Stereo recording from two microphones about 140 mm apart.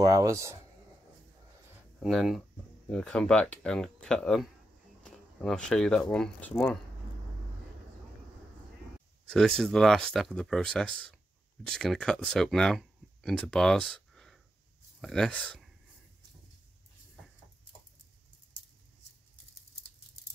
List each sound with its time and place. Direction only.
0.0 s speech: 25° right (ahead or behind)
2.0 s speech: centre (ahead or behind)
9.3 s speech: centre (ahead or behind)